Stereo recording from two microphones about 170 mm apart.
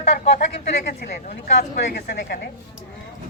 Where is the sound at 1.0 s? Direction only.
70° left (ahead or behind).